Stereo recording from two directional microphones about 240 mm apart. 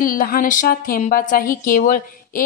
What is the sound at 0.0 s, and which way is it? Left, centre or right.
A woman's voice, left.